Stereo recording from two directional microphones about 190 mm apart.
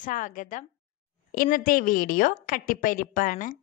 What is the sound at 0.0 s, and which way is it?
A woman's voice, 45° left (ahead or behind).